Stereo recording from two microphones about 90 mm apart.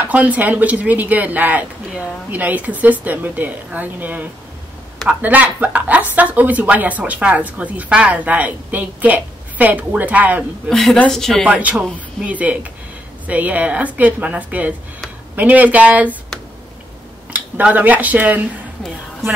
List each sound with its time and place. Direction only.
0.1 s speech: 15° right (ahead or behind)
10.7 s speech: 5° left (ahead or behind)
11.4 s speech: 10° right (ahead or behind)
12.3 s speech: 15° right (ahead or behind)
17.3 s speech: 15° right (ahead or behind)